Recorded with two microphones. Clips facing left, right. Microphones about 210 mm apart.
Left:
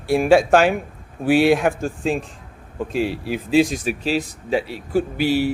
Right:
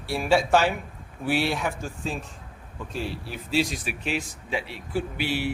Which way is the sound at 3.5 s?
50° left (ahead or behind).